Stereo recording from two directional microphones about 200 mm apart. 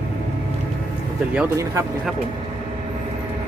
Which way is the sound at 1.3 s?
10° right (ahead or behind).